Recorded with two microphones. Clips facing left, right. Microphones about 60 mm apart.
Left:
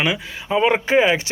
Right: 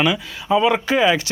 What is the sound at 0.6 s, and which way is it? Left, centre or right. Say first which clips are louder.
Speech: left 2 dB; left.